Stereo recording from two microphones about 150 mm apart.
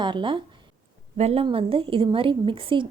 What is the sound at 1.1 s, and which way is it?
A woman's voice, 45° right (ahead or behind).